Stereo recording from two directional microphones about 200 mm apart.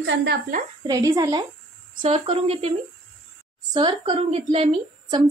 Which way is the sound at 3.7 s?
25° right (ahead or behind).